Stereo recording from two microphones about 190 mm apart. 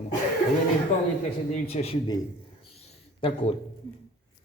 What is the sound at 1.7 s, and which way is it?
Speech, 30° left (ahead or behind).